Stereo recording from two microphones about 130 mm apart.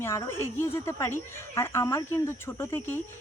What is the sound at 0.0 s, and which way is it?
A woman's voice, 20° left (ahead or behind).